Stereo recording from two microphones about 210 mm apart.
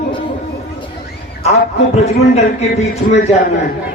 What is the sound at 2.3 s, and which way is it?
Speech, 30° left (ahead or behind).